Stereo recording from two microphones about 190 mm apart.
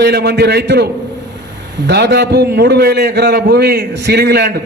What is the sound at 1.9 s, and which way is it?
A man's voice, 60° right (ahead or behind).